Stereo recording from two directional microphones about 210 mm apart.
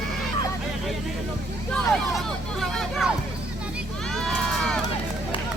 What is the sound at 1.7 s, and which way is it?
Speech, 5° left (ahead or behind).